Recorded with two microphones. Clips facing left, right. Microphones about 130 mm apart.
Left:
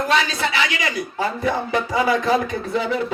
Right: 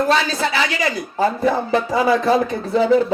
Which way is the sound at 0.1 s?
35° right (ahead or behind).